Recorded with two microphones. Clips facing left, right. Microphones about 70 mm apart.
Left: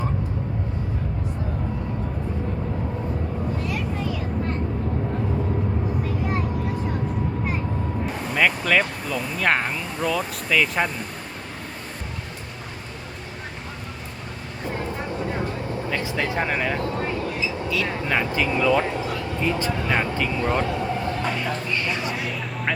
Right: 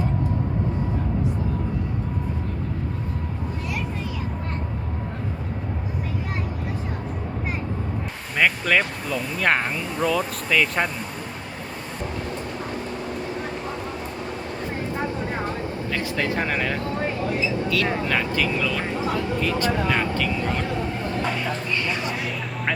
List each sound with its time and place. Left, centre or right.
8.4 s speech: centre
15.9 s speech: centre
18.0 s speech: centre
21.2 s speech: centre